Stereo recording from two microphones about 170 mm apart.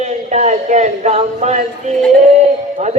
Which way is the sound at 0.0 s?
45° right (ahead or behind).